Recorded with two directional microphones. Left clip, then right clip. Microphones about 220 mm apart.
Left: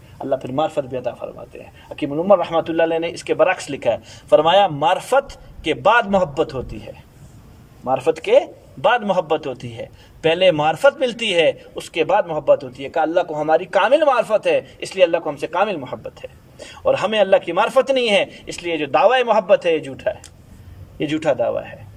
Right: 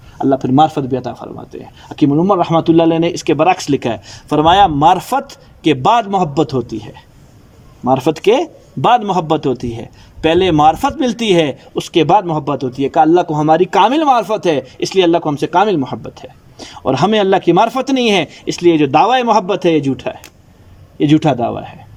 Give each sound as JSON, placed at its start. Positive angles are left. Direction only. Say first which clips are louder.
{"t": 0.2, "sound": "a man's voice", "louder": "right 9 dB", "side_deg": -30}
{"t": 7.9, "sound": "a man's voice", "louder": "right 5 dB", "side_deg": -35}